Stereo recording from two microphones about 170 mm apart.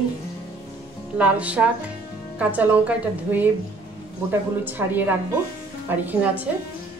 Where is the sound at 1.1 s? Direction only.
10° right (ahead or behind).